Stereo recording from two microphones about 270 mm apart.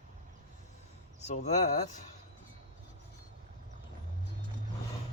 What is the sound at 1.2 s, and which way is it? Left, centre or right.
Speech, left.